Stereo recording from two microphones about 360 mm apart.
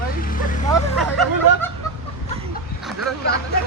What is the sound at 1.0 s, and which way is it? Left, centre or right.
Speech, centre.